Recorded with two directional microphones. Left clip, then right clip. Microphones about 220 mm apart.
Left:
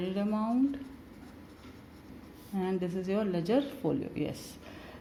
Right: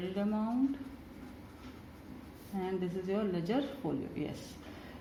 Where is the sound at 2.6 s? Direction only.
45° left (ahead or behind).